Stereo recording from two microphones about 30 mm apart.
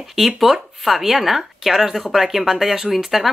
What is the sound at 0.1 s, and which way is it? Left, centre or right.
Speech, centre.